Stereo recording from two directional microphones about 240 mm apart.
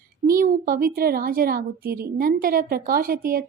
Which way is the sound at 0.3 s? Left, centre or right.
Right.